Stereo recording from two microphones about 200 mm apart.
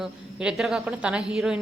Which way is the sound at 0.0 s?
5° right (ahead or behind).